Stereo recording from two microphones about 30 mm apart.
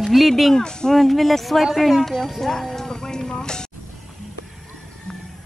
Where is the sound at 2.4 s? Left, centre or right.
Centre.